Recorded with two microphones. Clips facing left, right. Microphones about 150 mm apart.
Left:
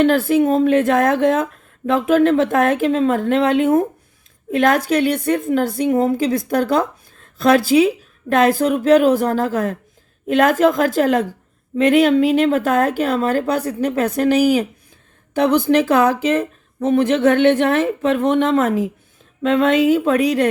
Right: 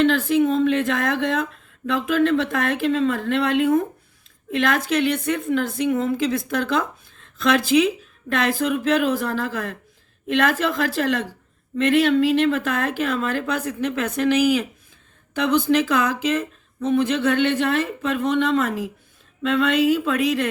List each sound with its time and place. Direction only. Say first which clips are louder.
0.0 s speech: left 4 dB; 45° left (ahead or behind)
15.4 s speech: left 4 dB; 55° left (ahead or behind)